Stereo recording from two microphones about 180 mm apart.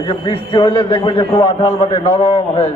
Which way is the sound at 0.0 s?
25° left (ahead or behind).